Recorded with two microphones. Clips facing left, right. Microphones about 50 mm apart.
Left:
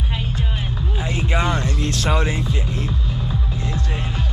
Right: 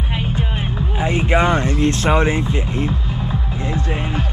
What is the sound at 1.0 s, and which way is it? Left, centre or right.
Speech, right.